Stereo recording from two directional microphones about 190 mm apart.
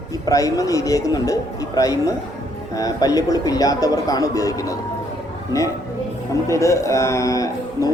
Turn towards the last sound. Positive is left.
turn(degrees=15)  # may be behind; listen again after turning